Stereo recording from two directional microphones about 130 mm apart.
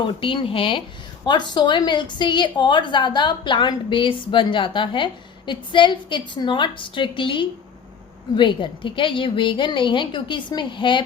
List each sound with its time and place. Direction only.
0.2 s a woman's voice: 40° left (ahead or behind)